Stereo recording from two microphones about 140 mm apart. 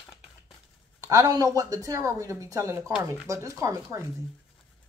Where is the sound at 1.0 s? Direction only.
25° right (ahead or behind).